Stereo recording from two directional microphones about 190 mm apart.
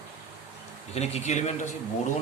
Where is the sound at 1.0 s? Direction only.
35° left (ahead or behind).